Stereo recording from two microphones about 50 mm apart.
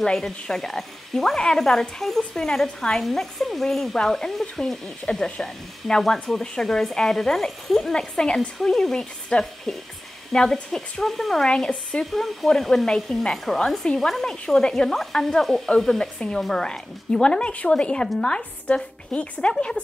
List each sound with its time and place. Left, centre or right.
0.0 s a woman's voice: centre
11.4 s speech: centre
12.1 s speech: centre